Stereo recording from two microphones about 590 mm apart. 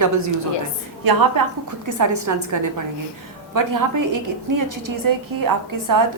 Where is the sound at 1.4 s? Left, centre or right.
Right.